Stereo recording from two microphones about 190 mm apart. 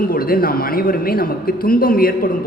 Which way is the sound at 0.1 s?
50° left (ahead or behind).